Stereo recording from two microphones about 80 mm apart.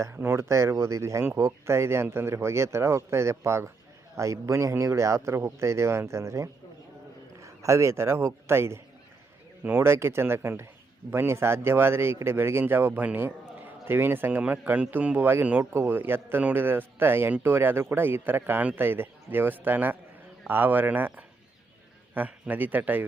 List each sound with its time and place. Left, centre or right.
0.0 s a man's voice: right